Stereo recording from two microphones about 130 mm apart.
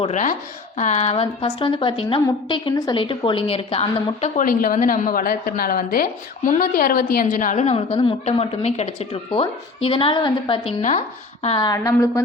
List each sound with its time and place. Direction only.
0.1 s speech: 75° left (ahead or behind)
1.1 s a woman's voice: 40° left (ahead or behind)
4.4 s a woman's voice: 90° left; by 9.0 s 55° left (ahead or behind)
9.3 s a woman's voice: 45° left (ahead or behind)
11.6 s a woman's voice: 25° left (ahead or behind)